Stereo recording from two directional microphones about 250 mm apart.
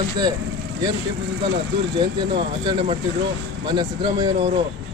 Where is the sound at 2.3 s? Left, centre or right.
Centre.